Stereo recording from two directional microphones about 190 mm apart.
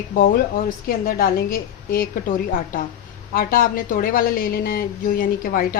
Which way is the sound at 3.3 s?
45° left (ahead or behind).